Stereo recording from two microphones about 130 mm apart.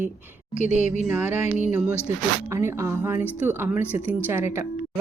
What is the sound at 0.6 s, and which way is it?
Speech, 70° left (ahead or behind).